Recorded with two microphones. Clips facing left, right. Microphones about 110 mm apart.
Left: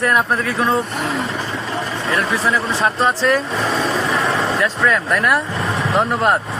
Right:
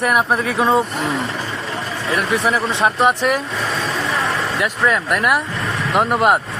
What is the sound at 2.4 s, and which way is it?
Speech, 20° right (ahead or behind).